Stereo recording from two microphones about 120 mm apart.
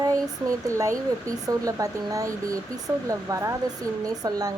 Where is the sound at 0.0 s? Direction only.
30° right (ahead or behind).